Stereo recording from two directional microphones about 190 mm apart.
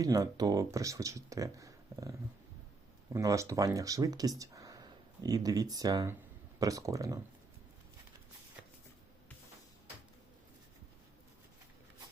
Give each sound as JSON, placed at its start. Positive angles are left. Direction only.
{"t": 0.0, "sound": "speech", "side_deg": -20}